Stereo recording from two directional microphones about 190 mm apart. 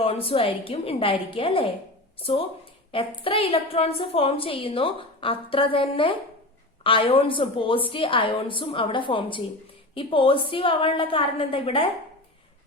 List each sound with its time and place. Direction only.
0.0 s a woman's voice: 30° left (ahead or behind)